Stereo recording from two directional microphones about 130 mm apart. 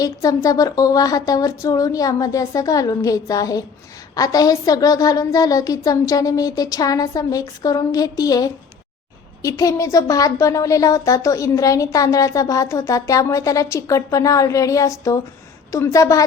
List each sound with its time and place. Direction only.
0.0 s speech: 25° left (ahead or behind)